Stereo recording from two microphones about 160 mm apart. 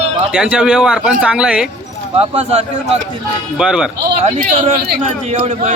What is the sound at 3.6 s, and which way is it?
Speech, 5° right (ahead or behind).